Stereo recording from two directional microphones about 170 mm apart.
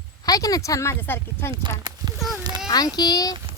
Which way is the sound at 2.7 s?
25° left (ahead or behind).